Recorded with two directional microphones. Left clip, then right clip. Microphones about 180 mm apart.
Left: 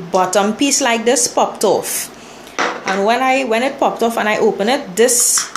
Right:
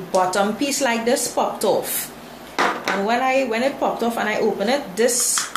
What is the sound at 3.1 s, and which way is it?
A woman's voice, 40° left (ahead or behind).